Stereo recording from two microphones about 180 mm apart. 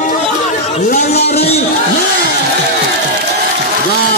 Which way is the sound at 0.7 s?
45° left (ahead or behind).